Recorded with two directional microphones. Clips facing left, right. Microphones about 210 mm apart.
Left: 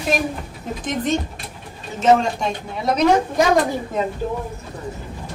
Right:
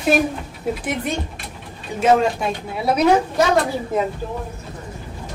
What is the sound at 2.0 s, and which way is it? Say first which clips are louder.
Speech: even; 5° right (ahead or behind).